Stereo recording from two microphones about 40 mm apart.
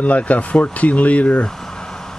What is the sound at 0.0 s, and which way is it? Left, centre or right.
Speech, left.